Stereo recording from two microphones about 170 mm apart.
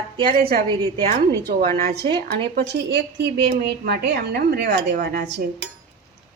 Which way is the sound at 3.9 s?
70° right (ahead or behind).